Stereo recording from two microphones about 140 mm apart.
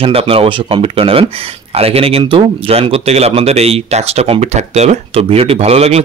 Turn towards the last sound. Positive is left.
turn(degrees=-45)  # may be behind; listen again after turning